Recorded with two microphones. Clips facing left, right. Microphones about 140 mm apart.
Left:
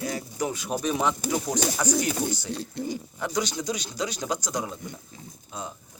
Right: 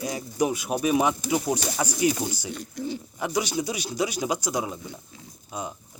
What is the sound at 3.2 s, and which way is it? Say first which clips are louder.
Speech: right 3 dB; 10° right (ahead or behind).